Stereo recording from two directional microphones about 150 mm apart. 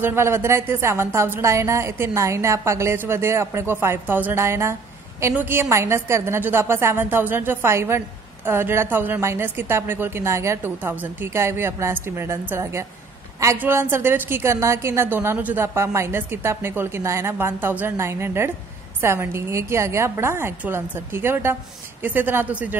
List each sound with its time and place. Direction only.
0.0 s a woman's voice: 15° right (ahead or behind)